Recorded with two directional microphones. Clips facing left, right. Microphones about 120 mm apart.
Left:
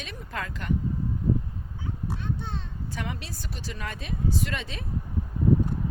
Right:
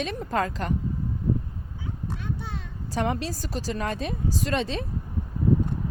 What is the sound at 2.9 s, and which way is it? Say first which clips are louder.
A woman's voice: right 10 dB; 35° right (ahead or behind).